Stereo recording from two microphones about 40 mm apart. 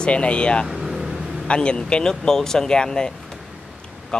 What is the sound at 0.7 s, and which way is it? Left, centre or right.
Vehicle, centre.